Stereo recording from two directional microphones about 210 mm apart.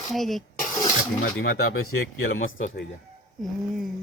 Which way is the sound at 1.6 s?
75° left (ahead or behind).